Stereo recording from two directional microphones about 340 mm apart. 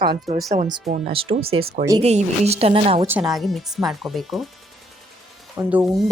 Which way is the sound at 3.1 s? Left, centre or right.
Centre.